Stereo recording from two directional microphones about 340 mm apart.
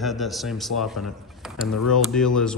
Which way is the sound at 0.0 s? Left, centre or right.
Centre.